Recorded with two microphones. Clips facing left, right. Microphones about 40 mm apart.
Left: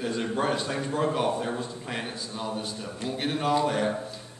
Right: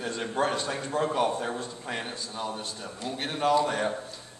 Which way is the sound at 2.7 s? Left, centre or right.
Centre.